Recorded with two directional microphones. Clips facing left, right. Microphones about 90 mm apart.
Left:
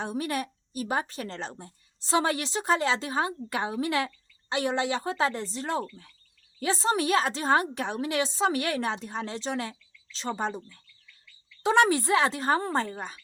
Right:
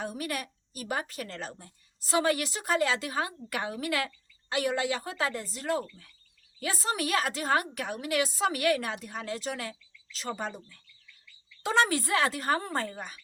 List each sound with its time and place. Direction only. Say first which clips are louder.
0.0 s speech: left 4 dB; 25° left (ahead or behind)